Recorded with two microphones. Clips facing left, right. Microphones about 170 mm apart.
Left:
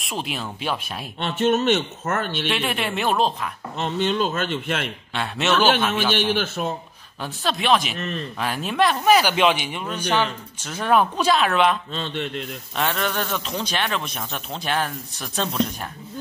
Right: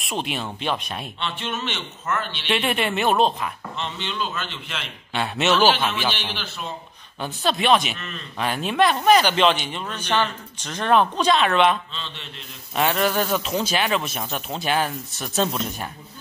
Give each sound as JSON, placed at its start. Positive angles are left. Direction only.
{"t": 0.0, "sound": "speech", "side_deg": 0}
{"t": 1.2, "sound": "a man's voice", "side_deg": 45}
{"t": 2.4, "sound": "speech", "side_deg": 0}
{"t": 3.7, "sound": "a man's voice", "side_deg": 45}
{"t": 5.1, "sound": "speech", "side_deg": 0}
{"t": 5.9, "sound": "a man's voice", "side_deg": 50}
{"t": 7.2, "sound": "speech", "side_deg": 0}
{"t": 8.0, "sound": "speech", "side_deg": 40}
{"t": 8.4, "sound": "speech", "side_deg": 0}
{"t": 11.9, "sound": "a man's voice", "side_deg": 50}
{"t": 12.7, "sound": "speech", "side_deg": -5}